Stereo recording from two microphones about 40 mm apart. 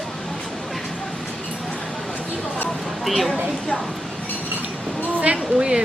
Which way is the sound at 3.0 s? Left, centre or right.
Centre.